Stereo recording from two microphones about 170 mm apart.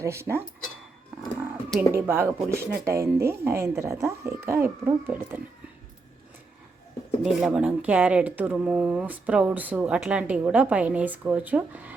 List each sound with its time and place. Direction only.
0.0 s speech: 15° right (ahead or behind)
1.9 s speech: 15° right (ahead or behind)
7.2 s speech: 5° right (ahead or behind)